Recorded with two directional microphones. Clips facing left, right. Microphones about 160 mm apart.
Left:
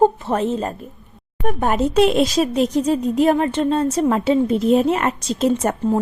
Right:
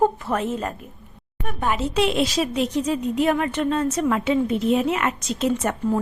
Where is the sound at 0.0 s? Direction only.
30° left (ahead or behind).